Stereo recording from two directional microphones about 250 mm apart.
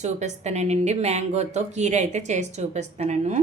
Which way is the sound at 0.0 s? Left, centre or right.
Right.